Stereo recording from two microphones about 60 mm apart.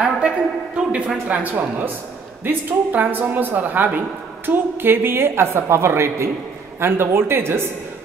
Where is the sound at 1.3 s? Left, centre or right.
Right.